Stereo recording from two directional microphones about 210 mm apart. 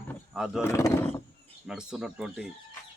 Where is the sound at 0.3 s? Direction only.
Centre (ahead or behind).